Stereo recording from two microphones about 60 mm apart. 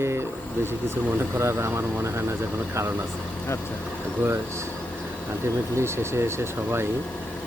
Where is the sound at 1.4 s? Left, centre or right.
Right.